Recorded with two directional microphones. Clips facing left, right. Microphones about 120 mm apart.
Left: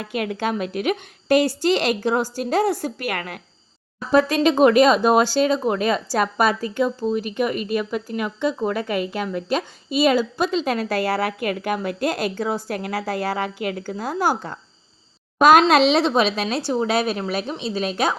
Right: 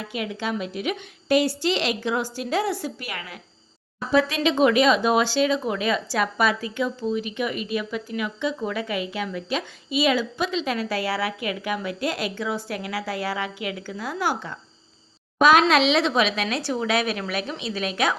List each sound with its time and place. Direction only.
0.1 s speech: 50° left (ahead or behind)
4.1 s speech: 45° left (ahead or behind)